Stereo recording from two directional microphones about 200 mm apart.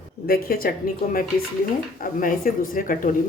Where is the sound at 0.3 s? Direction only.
50° left (ahead or behind).